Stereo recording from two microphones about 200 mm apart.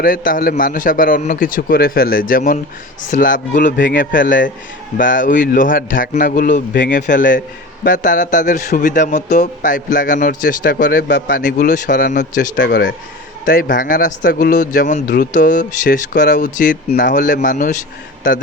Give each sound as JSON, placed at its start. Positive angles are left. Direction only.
{"t": 0.0, "sound": "a man's voice", "side_deg": 45}
{"t": 12.5, "sound": "speech", "side_deg": 55}
{"t": 13.4, "sound": "speech", "side_deg": 40}
{"t": 16.1, "sound": "speech", "side_deg": 60}
{"t": 16.4, "sound": "a man's voice", "side_deg": 40}